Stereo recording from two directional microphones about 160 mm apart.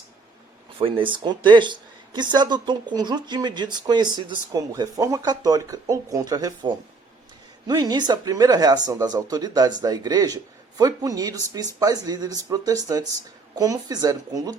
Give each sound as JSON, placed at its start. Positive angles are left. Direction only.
{"t": 0.8, "sound": "speech", "side_deg": -35}